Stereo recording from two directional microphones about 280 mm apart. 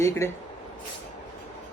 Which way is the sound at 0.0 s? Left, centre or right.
Centre.